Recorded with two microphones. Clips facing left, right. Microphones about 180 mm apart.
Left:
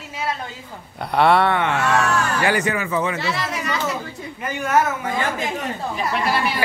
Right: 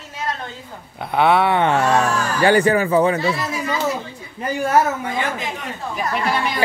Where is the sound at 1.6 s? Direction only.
35° right (ahead or behind).